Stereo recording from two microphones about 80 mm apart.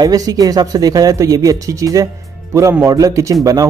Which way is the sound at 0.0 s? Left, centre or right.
Right.